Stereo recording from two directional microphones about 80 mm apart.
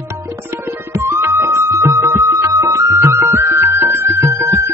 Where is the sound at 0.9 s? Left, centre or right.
Right.